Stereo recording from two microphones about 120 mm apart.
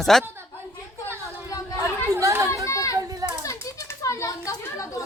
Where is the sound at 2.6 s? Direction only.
25° left (ahead or behind).